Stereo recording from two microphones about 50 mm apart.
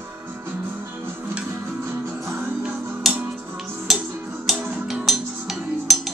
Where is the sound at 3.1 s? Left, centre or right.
Centre.